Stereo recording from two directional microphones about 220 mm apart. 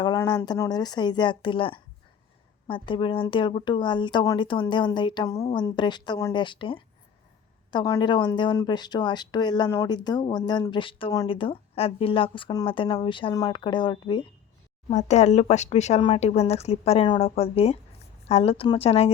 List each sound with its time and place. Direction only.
0.0 s speech: 20° left (ahead or behind)
14.8 s speech: 30° left (ahead or behind)